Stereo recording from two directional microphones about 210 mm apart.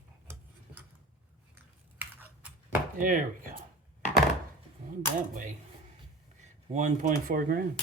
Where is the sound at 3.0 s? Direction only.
40° right (ahead or behind).